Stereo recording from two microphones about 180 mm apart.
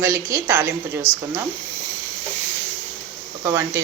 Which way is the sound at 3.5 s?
15° right (ahead or behind).